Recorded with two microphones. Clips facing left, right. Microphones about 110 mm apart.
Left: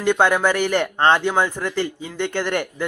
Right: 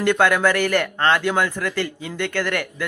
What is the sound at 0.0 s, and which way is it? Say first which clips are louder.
Speech: even; 20° left (ahead or behind).